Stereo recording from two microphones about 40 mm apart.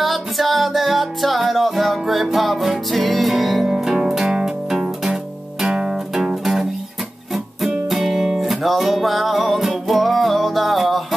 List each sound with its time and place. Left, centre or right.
0.0 s music: centre
3.6 s music: centre
4.8 s guitar: centre
5.7 s music: centre
7.9 s music: centre